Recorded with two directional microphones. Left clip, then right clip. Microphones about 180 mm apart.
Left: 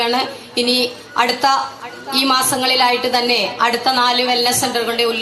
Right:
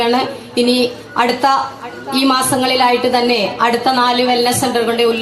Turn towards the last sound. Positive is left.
turn(degrees=-10)  # may be behind; listen again after turning